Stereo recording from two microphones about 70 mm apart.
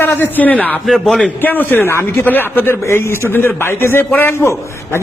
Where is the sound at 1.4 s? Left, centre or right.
Left.